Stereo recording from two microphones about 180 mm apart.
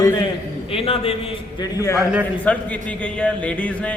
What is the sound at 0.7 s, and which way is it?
A man's voice, 30° left (ahead or behind).